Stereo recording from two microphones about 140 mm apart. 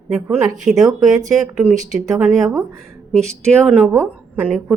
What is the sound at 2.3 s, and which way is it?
Speech, centre (ahead or behind).